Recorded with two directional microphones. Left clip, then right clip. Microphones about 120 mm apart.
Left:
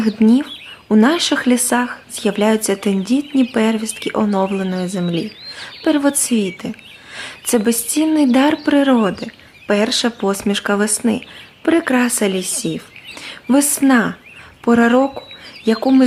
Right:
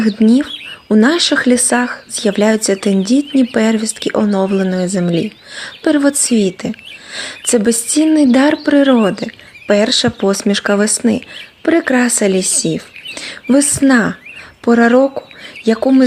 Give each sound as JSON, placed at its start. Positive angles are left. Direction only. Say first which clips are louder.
{"t": 0.3, "sound": "speech", "louder": "right 4 dB", "side_deg": -30}